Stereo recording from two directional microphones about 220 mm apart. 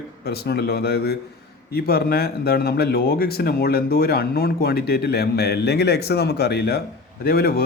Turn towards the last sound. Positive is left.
turn(degrees=45)  # may be behind; listen again after turning